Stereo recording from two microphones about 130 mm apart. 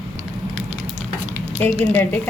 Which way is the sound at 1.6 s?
15° left (ahead or behind).